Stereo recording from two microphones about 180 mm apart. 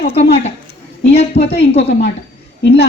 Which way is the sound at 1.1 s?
35° left (ahead or behind).